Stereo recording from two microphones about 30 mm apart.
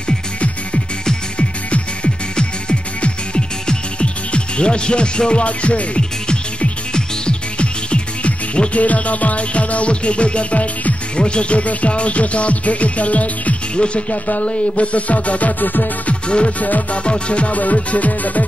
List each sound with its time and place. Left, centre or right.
2.3 s music: left
5.4 s music: left
5.9 s music: left
7.5 s music: left
8.7 s music: left
11.1 s music: left
13.7 s music: left
14.1 s music: left
15.6 s music: left
16.3 s music: left
16.5 s music: left
16.9 s music: left
17.6 s music: left